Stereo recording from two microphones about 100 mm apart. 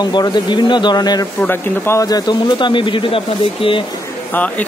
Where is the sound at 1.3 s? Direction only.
20° left (ahead or behind).